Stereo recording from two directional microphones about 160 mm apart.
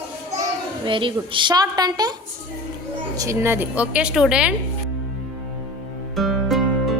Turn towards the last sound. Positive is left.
turn(degrees=0)  # may be behind; listen again after turning